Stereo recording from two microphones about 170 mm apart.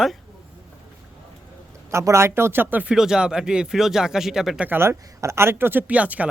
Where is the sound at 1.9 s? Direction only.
15° right (ahead or behind).